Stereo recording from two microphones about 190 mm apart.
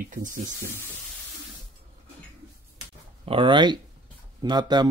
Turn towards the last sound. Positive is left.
turn(degrees=-20)  # may be behind; listen again after turning